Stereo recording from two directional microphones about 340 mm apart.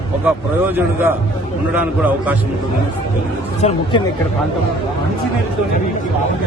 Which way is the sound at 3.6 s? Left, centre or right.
Centre.